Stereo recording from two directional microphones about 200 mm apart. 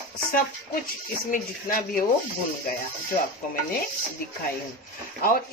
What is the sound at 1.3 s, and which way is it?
Speech, 45° left (ahead or behind).